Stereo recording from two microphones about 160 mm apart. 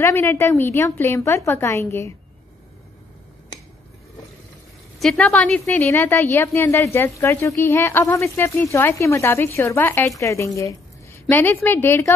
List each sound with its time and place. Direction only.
0.0 s a woman's voice: 15° left (ahead or behind)
5.0 s a woman's voice: 5° left (ahead or behind)